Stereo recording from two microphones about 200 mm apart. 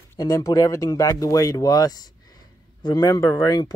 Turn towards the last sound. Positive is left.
turn(degrees=20)  # may be behind; listen again after turning